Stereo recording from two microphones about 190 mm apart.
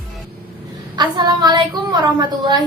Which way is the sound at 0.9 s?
20° right (ahead or behind).